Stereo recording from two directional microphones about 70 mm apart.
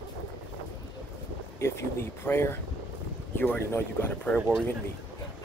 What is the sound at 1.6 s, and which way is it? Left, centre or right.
Speech, left.